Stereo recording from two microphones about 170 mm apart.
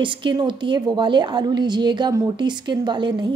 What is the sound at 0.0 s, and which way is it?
A woman's voice, 30° right (ahead or behind).